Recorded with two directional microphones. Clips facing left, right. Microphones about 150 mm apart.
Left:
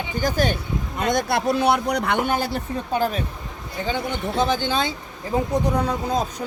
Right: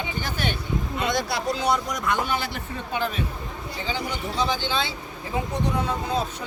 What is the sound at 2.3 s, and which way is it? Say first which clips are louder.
Speech: left 6 dB; 40° left (ahead or behind).